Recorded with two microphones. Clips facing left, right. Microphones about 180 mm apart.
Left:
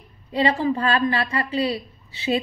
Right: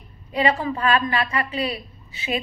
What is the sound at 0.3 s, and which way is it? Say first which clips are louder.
A woman's voice: left 1 dB; 30° left (ahead or behind).